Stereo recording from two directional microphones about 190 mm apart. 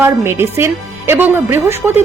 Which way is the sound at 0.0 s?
15° right (ahead or behind).